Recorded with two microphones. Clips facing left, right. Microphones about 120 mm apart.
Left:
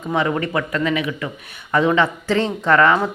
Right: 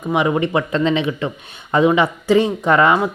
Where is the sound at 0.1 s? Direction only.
15° right (ahead or behind).